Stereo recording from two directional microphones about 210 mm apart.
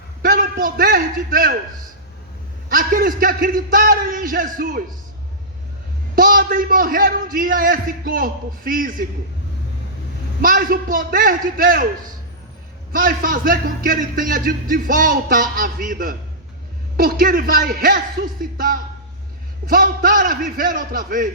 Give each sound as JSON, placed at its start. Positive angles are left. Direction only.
{"t": 0.2, "sound": "a man's voice", "side_deg": -40}
{"t": 2.6, "sound": "speech", "side_deg": -40}
{"t": 6.1, "sound": "speech", "side_deg": -40}
{"t": 10.4, "sound": "speech", "side_deg": -40}
{"t": 12.9, "sound": "speech", "side_deg": -40}